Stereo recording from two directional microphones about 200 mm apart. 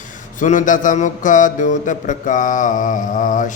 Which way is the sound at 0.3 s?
40° left (ahead or behind).